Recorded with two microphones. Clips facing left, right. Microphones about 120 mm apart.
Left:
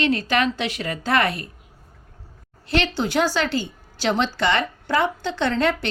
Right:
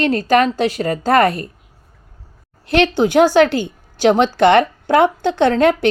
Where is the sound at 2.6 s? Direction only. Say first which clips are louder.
Right 8 dB; 55° right (ahead or behind).